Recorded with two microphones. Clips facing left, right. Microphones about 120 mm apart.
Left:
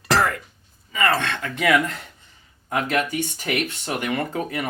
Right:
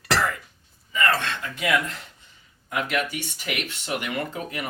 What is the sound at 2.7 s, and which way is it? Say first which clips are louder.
Speech: left 4 dB; 40° left (ahead or behind).